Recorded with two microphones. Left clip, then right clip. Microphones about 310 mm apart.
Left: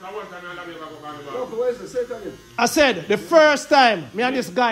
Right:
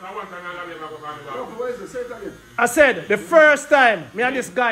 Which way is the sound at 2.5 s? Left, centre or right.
Centre.